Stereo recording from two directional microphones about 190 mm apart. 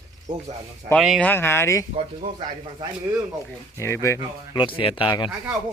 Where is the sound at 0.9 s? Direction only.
Centre (ahead or behind).